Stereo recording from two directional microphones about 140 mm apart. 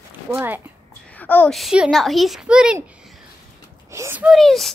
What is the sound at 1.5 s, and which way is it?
A child's voice, 5° right (ahead or behind).